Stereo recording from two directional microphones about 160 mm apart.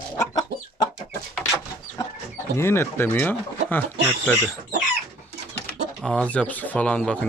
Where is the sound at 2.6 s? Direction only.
15° left (ahead or behind).